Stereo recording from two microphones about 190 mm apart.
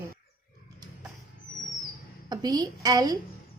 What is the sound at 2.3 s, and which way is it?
Speech, 20° right (ahead or behind).